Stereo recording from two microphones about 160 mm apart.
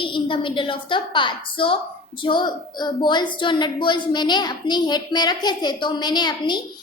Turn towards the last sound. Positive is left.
turn(degrees=25)  # may be behind; listen again after turning